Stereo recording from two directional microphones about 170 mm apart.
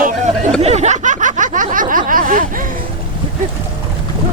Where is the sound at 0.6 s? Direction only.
40° right (ahead or behind).